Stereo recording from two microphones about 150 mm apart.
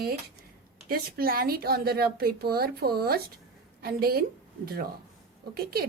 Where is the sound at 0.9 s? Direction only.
80° right.